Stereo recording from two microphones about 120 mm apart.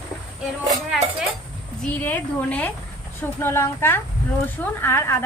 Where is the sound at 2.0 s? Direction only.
15° left (ahead or behind).